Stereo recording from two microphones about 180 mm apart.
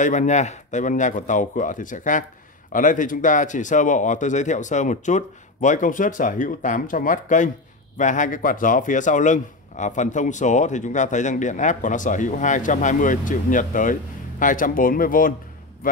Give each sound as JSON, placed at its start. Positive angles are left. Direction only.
{"t": 0.0, "sound": "speech", "side_deg": 45}